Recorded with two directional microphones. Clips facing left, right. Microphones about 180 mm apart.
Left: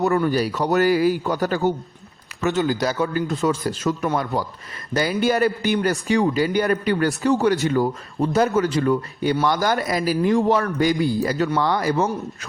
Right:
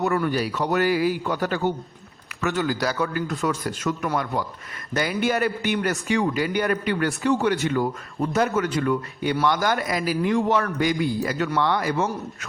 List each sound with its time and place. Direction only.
0.0 s a man's voice: 35° left (ahead or behind)
2.5 s a man's voice: 20° left (ahead or behind); by 12.5 s 35° left (ahead or behind)